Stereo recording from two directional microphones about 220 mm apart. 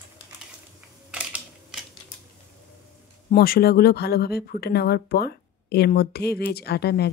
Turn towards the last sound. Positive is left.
turn(degrees=45)  # may be behind; listen again after turning